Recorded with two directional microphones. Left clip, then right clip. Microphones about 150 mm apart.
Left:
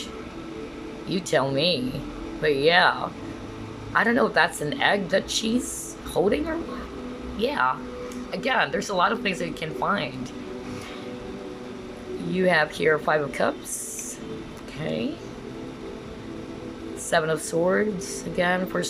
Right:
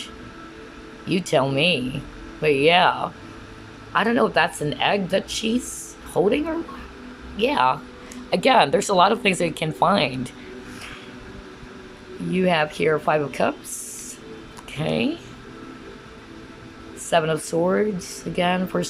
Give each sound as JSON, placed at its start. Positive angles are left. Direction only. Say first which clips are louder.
{"t": 1.0, "sound": "speech", "louder": "right 3 dB", "side_deg": -10}
{"t": 12.3, "sound": "speech", "louder": "right 1 dB", "side_deg": -10}
{"t": 14.8, "sound": "speech", "louder": "right 5 dB", "side_deg": -15}
{"t": 17.1, "sound": "speech", "louder": "right 3 dB", "side_deg": -10}